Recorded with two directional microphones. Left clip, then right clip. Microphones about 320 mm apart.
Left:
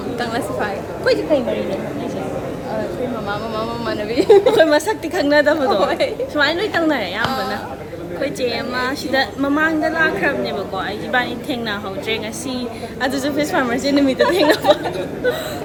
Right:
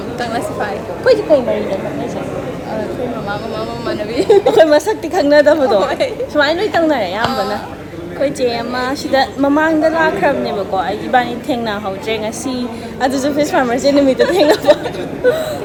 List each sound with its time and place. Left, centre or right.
0.2 s a woman's voice: centre
1.0 s a woman's voice: centre
3.8 s speech: centre
4.5 s a woman's voice: centre
5.8 s a woman's voice: centre
6.3 s a woman's voice: centre